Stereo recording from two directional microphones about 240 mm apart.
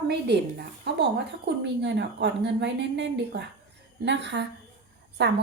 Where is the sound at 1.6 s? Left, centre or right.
Right.